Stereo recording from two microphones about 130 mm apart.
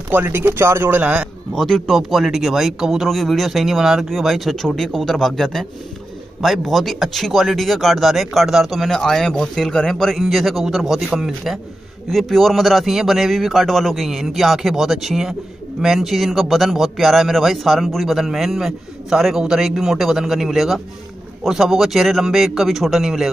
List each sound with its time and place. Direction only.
0.1 s speech: 15° right (ahead or behind)
1.5 s speech: centre (ahead or behind)